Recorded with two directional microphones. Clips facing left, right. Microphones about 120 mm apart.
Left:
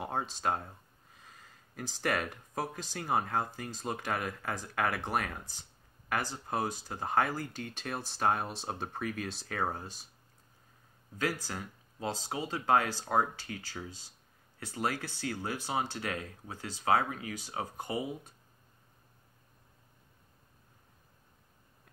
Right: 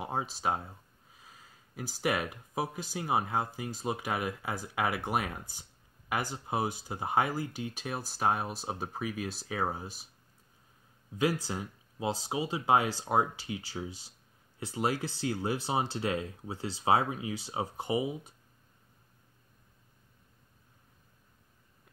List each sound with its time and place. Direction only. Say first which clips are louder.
0.0 s speech: right 1 dB; 5° right (ahead or behind)
11.1 s speech: right 4 dB; 15° right (ahead or behind)